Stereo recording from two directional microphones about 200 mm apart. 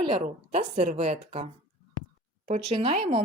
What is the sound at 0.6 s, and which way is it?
Speech, 35° right (ahead or behind).